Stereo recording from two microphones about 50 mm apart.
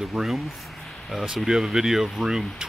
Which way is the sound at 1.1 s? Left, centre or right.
Centre.